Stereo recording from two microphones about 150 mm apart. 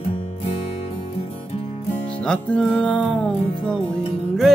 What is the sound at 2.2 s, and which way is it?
Music, 5° left (ahead or behind).